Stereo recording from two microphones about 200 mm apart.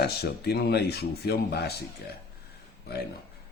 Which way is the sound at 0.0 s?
55° left (ahead or behind).